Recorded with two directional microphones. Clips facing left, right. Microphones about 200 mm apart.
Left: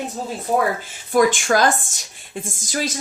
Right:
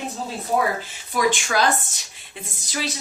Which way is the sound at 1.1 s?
50° left (ahead or behind).